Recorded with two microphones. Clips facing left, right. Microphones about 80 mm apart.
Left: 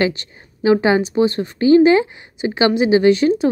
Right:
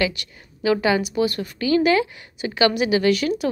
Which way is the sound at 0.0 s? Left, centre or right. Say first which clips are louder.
Left 5 dB; left.